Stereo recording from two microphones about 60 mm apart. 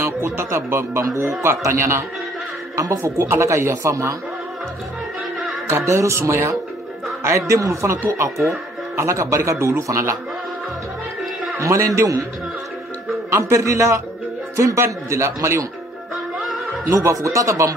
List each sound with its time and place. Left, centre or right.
0.0 s speech: right
3.2 s speech: right
5.7 s speech: right
11.6 s speech: right
13.3 s speech: right
16.8 s speech: right